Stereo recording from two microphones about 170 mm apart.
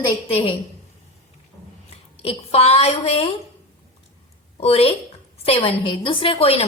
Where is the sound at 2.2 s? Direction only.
35° left (ahead or behind).